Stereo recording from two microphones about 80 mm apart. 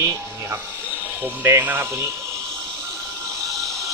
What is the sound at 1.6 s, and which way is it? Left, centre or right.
Speech, right.